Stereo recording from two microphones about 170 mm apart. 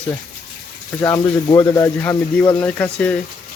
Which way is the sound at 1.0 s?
20° left (ahead or behind).